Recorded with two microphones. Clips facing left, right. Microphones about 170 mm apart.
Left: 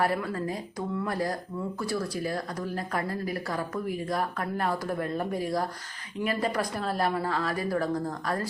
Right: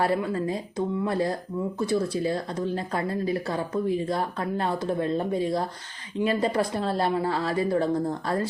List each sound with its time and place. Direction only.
0.0 s speech: 25° right (ahead or behind)